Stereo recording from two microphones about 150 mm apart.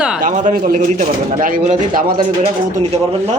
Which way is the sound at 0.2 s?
60° right (ahead or behind).